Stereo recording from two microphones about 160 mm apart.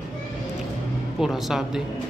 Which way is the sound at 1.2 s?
Centre (ahead or behind).